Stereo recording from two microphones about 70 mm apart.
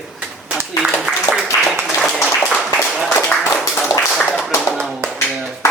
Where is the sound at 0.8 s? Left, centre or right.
Centre.